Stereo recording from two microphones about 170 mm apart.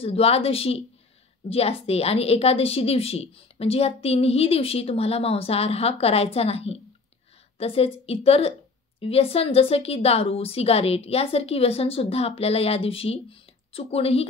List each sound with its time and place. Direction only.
0.0 s a woman's voice: 35° left (ahead or behind)